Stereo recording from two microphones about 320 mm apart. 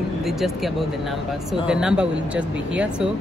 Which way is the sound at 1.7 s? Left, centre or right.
Centre.